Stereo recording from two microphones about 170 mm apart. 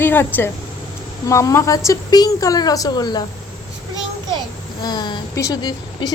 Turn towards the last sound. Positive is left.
turn(degrees=25)  # may be behind; listen again after turning